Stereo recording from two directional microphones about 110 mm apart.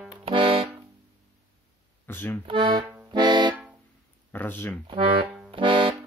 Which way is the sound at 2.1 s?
20° left (ahead or behind).